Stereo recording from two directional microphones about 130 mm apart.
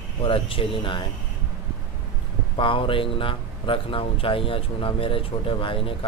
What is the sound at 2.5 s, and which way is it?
Speech, 40° left (ahead or behind).